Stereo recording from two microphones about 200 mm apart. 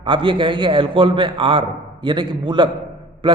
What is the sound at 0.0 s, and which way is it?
A man's voice, 25° right (ahead or behind).